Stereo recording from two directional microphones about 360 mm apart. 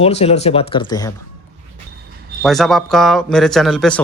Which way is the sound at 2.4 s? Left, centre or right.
Centre.